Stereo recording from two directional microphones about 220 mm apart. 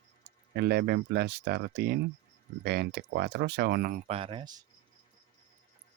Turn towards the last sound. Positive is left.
turn(degrees=-20)  # may be behind; listen again after turning